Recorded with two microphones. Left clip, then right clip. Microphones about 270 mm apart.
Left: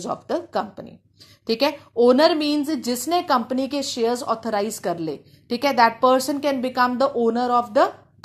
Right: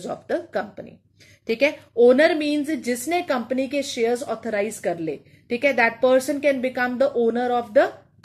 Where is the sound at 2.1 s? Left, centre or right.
Left.